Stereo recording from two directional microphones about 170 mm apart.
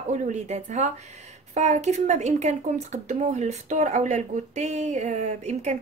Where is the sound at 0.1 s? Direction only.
45° right (ahead or behind).